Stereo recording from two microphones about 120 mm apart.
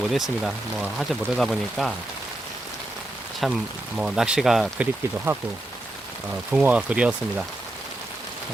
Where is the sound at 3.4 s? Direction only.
5° right (ahead or behind).